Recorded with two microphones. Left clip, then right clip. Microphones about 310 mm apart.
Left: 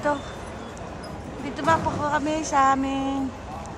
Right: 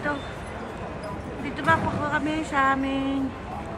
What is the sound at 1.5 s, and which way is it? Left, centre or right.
Speech, centre.